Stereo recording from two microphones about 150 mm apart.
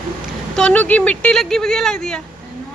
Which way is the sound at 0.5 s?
5° left (ahead or behind).